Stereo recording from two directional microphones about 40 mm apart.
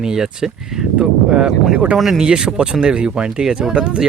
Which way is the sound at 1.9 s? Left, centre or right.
Centre.